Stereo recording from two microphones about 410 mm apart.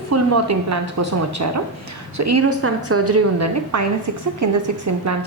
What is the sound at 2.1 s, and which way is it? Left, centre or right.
A woman's voice, right.